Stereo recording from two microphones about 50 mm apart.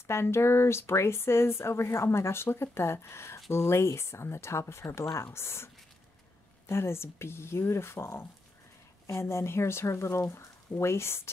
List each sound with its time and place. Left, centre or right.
0.0 s speech: left
6.7 s speech: left